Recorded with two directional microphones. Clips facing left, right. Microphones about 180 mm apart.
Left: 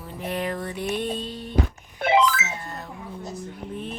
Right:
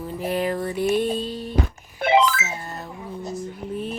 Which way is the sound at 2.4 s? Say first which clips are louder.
Right 1 dB; 30° right (ahead or behind).